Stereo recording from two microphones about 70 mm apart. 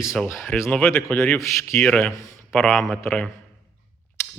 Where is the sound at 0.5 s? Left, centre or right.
Centre.